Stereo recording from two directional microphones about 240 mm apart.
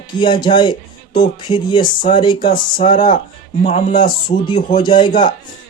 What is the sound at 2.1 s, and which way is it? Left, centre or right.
Speech, centre.